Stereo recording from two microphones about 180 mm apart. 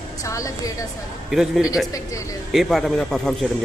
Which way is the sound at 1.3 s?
Centre (ahead or behind).